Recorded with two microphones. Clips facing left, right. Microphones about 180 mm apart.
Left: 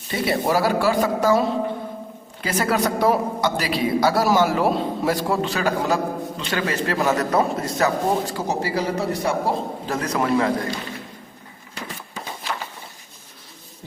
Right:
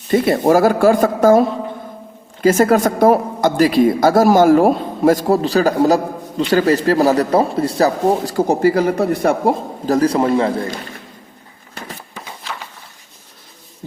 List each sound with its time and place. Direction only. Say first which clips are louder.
0.1 s a woman's voice: right 8 dB; 50° right (ahead or behind)
8.4 s a woman's voice: right 10 dB; 50° right (ahead or behind)
9.9 s a man's voice: right 8 dB; 30° right (ahead or behind)